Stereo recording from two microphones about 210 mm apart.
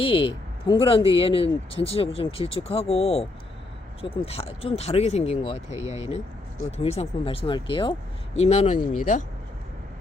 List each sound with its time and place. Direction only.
0.0 s speech: 25° left (ahead or behind)